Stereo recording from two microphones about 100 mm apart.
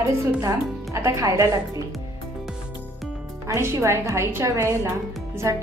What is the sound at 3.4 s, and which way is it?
A woman's voice, 30° right (ahead or behind).